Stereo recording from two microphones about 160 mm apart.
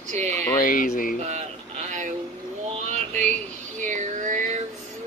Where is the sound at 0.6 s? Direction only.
60° left (ahead or behind).